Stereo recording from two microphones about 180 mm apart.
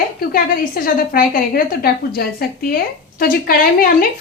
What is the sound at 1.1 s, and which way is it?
A woman's voice, 55° left (ahead or behind).